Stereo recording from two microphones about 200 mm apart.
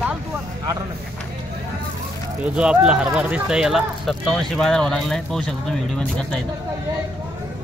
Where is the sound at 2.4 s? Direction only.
5° right (ahead or behind).